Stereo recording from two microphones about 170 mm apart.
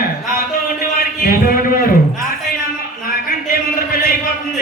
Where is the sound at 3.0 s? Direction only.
60° left (ahead or behind).